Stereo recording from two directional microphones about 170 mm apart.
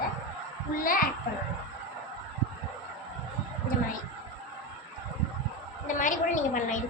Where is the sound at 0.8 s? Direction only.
55° left (ahead or behind).